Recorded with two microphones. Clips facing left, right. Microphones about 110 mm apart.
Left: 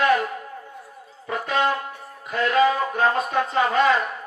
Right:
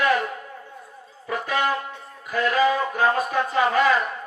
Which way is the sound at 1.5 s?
25° left (ahead or behind).